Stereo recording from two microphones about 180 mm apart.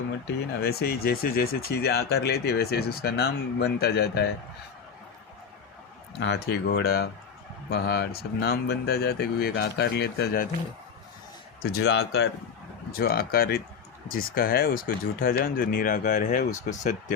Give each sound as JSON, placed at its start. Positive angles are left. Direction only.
{"t": 0.3, "sound": "speech", "side_deg": 60}
{"t": 6.1, "sound": "speech", "side_deg": 70}
{"t": 11.6, "sound": "speech", "side_deg": 60}
{"t": 13.0, "sound": "speech", "side_deg": 55}